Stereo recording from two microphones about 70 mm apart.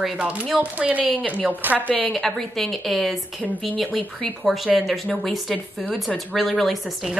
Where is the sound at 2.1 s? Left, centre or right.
Centre.